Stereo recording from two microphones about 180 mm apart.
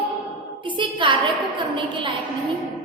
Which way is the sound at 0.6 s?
25° right (ahead or behind).